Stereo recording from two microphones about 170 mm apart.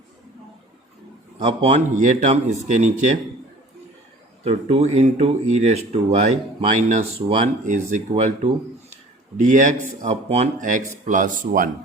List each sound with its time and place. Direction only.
1.4 s speech: 40° right (ahead or behind)
4.4 s speech: 40° right (ahead or behind)
9.4 s speech: 45° right (ahead or behind)